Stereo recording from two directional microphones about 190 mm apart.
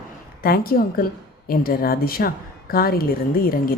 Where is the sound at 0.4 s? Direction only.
50° left (ahead or behind).